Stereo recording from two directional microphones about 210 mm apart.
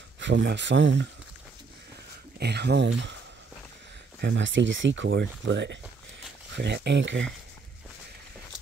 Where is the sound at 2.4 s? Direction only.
50° right (ahead or behind).